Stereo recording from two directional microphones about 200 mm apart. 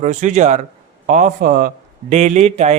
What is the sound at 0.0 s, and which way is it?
A man's voice, 40° right (ahead or behind).